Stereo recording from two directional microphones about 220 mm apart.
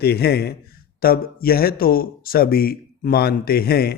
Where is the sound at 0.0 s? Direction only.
45° left (ahead or behind).